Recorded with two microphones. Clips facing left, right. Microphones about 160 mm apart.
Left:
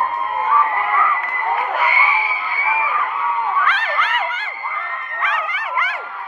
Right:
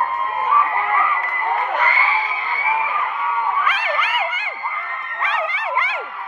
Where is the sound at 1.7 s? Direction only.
10° left (ahead or behind).